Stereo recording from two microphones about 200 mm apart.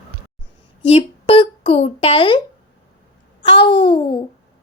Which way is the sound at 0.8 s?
25° left (ahead or behind).